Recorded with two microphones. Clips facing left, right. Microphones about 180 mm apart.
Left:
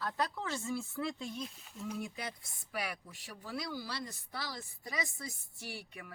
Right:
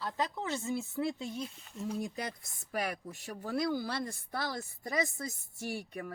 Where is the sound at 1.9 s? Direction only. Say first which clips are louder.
Right 4 dB; 40° right (ahead or behind).